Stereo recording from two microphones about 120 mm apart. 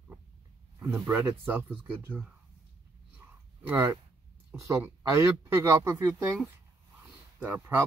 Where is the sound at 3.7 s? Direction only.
25° right (ahead or behind).